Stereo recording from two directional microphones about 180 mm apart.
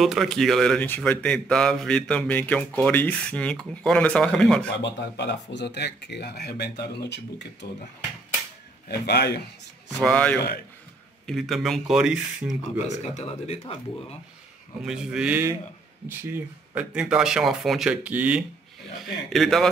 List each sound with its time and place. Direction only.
0.0 s speech: centre (ahead or behind)
5.1 s speech: 75° left (ahead or behind); by 7.8 s 60° left (ahead or behind)
8.8 s speech: 65° left (ahead or behind)
10.0 s a man's voice: 5° left (ahead or behind)
12.7 s speech: 40° left (ahead or behind)
14.8 s speech: 5° right (ahead or behind)